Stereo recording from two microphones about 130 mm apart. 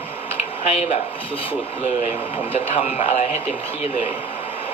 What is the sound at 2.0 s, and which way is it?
Speech, 50° left (ahead or behind).